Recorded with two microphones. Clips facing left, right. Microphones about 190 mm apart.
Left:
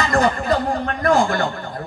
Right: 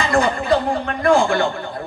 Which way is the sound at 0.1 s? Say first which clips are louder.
Right 2 dB; 40° left (ahead or behind).